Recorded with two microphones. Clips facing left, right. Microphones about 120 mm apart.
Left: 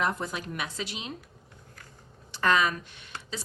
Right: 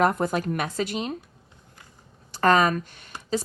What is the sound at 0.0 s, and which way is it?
Speech, 50° right (ahead or behind).